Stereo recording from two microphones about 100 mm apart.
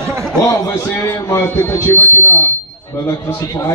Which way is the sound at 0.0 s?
25° right (ahead or behind).